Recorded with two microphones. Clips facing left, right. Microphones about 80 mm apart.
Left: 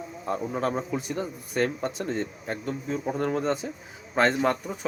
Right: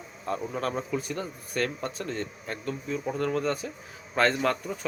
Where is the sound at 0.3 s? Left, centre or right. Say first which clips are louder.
Left 2 dB; centre.